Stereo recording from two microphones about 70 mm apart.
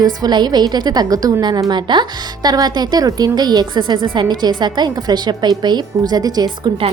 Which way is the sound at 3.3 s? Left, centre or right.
Right.